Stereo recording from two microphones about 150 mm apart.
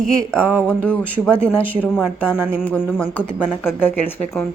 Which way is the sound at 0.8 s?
5° left (ahead or behind).